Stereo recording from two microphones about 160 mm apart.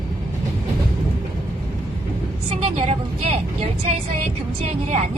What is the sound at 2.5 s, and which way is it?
Vehicle, 40° right (ahead or behind).